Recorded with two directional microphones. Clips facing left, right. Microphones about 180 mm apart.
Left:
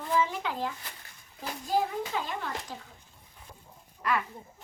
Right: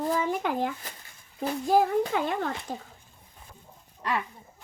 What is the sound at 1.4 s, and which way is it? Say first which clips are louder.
A child's voice: right 6 dB; 65° right (ahead or behind).